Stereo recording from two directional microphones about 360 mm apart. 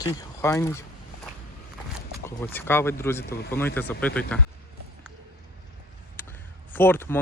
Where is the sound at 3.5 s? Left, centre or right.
Centre.